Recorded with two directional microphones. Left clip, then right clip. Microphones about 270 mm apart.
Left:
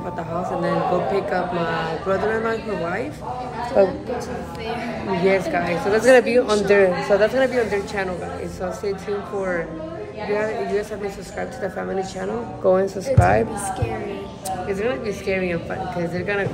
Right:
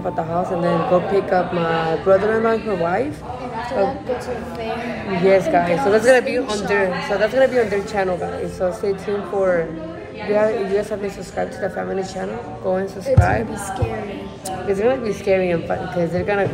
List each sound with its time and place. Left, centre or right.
0.4 s speech: centre
3.8 s speech: left
5.2 s speech: centre
6.0 s speech: left
7.2 s speech: centre
11.3 s speech: centre
12.6 s speech: left
14.7 s speech: centre